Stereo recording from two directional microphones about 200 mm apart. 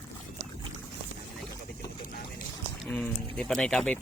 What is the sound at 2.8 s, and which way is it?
Speech, 5° left (ahead or behind).